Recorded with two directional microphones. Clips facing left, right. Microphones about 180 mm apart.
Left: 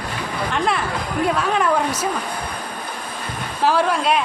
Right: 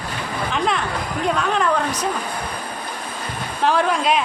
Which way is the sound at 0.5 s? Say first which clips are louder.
Even; 5° left (ahead or behind).